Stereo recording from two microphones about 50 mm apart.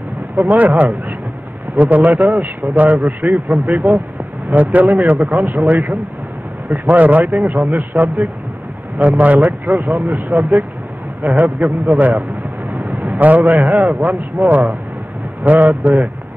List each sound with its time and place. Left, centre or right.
0.5 s a man's voice: right